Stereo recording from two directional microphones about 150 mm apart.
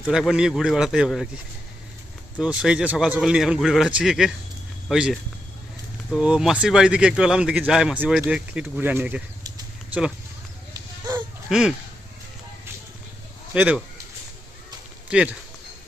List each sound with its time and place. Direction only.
0.0 s speech: 5° right (ahead or behind)
2.4 s speech: 5° right (ahead or behind)
10.8 s a sound: 20° right (ahead or behind)
11.4 s speech: 5° right (ahead or behind)
13.5 s speech: 10° right (ahead or behind)
15.1 s speech: 5° right (ahead or behind)